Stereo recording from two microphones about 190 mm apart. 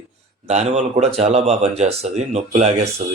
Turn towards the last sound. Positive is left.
turn(degrees=-35)  # may be behind; listen again after turning